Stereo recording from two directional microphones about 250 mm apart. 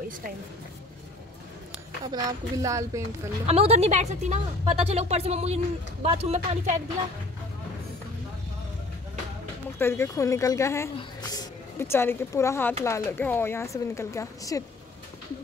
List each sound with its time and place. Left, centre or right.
2.0 s speech: centre
3.4 s speech: right
9.8 s speech: centre